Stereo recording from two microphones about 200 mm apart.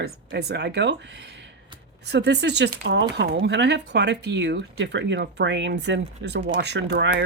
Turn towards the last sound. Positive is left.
turn(degrees=-60)  # may be behind; listen again after turning